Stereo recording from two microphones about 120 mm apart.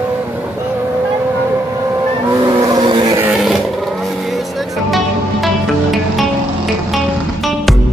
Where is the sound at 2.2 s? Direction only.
30° right (ahead or behind).